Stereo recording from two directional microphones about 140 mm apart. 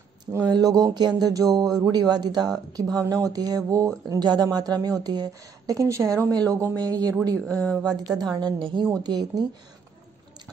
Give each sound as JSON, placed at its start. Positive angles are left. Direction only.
{"t": 0.5, "sound": "speech", "side_deg": -25}
{"t": 7.3, "sound": "a woman's voice", "side_deg": 5}
{"t": 8.2, "sound": "a woman's voice", "side_deg": -30}